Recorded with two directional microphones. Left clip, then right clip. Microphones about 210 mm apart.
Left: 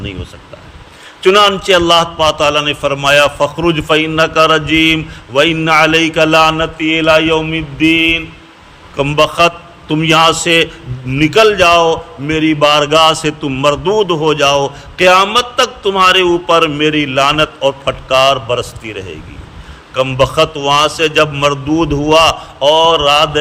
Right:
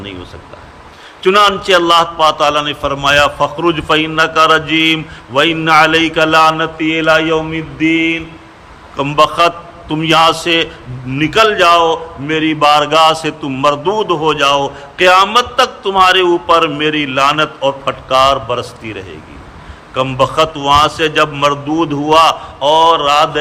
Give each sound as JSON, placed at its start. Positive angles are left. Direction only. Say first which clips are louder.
{"t": 1.2, "sound": "a man's voice", "louder": "left 1 dB", "side_deg": 20}